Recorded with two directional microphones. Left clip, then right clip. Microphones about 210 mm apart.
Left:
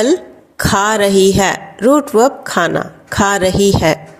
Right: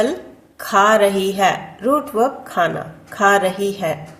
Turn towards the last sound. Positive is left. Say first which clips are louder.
# left 9 dB
turn(degrees=40)  # may be behind; listen again after turning